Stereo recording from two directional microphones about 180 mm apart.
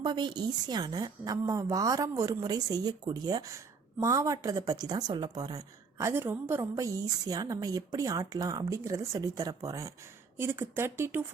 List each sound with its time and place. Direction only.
0.0 s a woman's voice: 25° right (ahead or behind)